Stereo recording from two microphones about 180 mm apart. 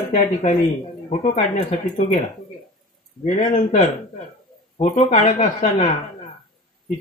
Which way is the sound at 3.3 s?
40° left (ahead or behind).